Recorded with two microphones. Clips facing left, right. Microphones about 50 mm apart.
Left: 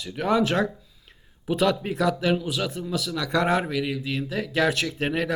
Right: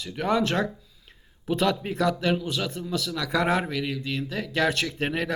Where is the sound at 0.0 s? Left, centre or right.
Centre.